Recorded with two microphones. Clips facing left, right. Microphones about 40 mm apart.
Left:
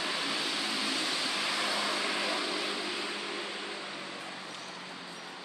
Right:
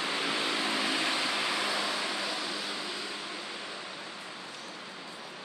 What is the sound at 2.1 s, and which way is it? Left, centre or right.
Vehicle, centre.